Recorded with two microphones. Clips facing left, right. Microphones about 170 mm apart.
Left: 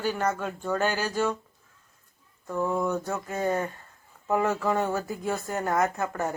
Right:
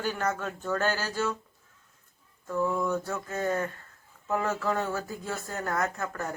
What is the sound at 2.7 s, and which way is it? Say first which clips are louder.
Speech: left 2 dB; 15° left (ahead or behind).